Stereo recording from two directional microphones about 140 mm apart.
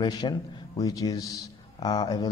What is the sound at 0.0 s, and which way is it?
A man's voice, 30° left (ahead or behind).